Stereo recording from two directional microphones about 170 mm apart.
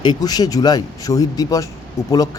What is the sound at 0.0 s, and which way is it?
Speech, 25° left (ahead or behind).